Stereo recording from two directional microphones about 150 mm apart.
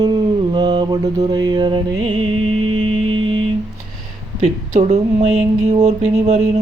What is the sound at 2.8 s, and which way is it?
Music, 35° right (ahead or behind).